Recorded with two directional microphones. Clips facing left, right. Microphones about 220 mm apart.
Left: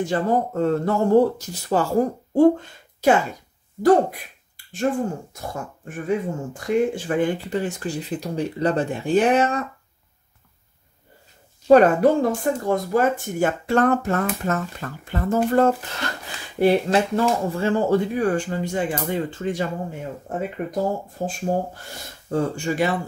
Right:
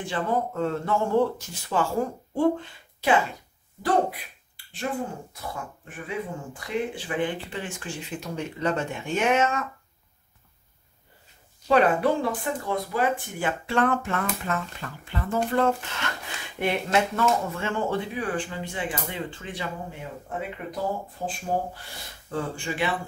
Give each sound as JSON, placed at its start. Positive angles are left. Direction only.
{"t": 0.0, "sound": "speech", "side_deg": 40}
{"t": 5.3, "sound": "speech", "side_deg": 45}
{"t": 11.6, "sound": "speech", "side_deg": 45}
{"t": 22.3, "sound": "speech", "side_deg": 40}